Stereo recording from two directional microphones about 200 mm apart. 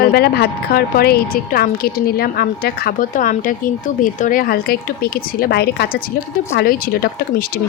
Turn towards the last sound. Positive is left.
turn(degrees=50)  # may be behind; listen again after turning